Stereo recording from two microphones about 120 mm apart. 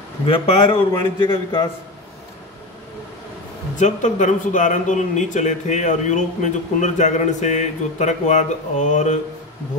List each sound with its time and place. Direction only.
0.3 s a man's voice: 45° left (ahead or behind)
3.7 s speech: 90° left